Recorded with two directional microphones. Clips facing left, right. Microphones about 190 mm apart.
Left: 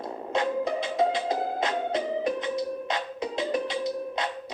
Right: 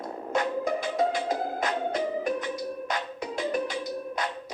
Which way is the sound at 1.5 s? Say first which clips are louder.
Left 1 dB; 25° left (ahead or behind).